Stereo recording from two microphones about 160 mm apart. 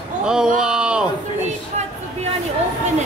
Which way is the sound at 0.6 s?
5° right (ahead or behind).